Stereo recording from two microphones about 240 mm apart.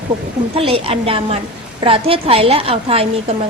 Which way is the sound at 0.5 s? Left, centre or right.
Right.